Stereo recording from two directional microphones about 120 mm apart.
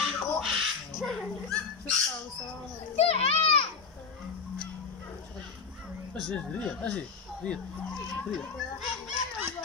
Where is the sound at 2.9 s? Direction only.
55° left (ahead or behind).